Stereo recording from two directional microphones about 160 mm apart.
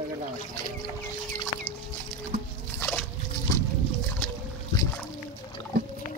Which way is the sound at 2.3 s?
45° right (ahead or behind).